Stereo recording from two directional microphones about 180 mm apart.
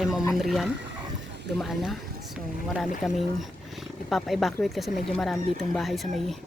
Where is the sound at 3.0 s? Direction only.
Centre (ahead or behind).